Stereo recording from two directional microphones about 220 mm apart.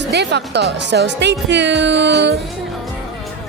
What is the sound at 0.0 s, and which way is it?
Speech, 50° right (ahead or behind).